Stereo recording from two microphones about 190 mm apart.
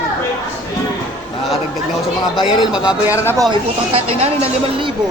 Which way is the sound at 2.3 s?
Centre (ahead or behind).